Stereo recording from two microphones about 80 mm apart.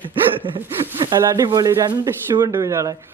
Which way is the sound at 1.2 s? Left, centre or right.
Right.